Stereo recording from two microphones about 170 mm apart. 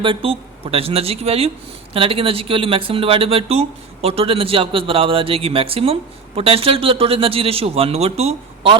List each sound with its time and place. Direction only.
0.0 s speech: 30° right (ahead or behind)